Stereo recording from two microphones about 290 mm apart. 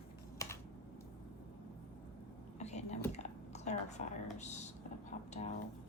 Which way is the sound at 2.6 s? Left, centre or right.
Left.